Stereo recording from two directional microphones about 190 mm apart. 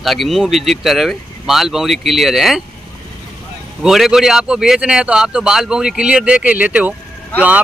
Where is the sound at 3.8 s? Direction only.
Centre (ahead or behind).